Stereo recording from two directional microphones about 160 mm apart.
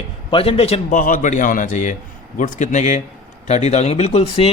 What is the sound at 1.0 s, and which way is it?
A man's voice, 55° left (ahead or behind).